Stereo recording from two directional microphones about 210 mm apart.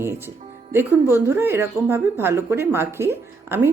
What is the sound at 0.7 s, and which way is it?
A woman's voice, 10° right (ahead or behind).